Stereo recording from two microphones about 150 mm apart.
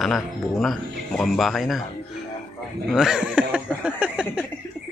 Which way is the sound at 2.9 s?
5° right (ahead or behind).